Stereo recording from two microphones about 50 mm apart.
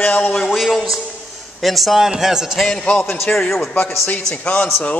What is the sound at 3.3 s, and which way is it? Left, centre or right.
Speech, left.